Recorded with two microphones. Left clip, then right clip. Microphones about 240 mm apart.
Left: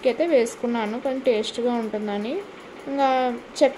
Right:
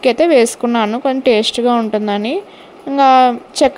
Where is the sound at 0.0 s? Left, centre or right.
Right.